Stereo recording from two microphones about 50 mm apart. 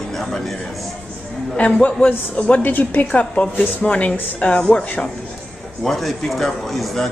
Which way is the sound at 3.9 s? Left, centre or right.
Left.